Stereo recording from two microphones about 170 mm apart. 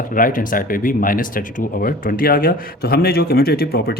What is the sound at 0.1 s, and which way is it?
Speech, 55° left (ahead or behind).